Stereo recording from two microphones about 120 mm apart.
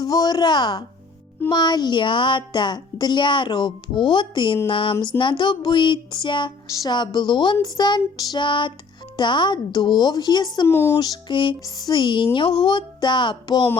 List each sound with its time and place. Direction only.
0.0 s speech: 35° left (ahead or behind)
10.7 s speech: 20° left (ahead or behind)
10.9 s speech: 35° left (ahead or behind)